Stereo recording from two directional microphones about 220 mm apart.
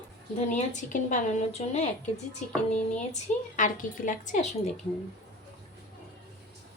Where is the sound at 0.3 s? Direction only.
35° left (ahead or behind).